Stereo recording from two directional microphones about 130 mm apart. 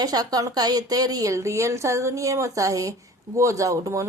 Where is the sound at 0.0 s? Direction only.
30° right (ahead or behind).